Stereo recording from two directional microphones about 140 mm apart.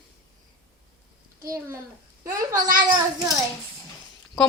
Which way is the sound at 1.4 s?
20° right (ahead or behind).